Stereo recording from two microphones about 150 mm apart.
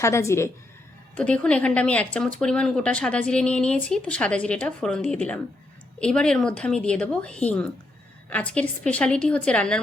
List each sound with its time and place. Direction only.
0.0 s a woman's voice: 20° left (ahead or behind)
1.1 s speech: 10° left (ahead or behind)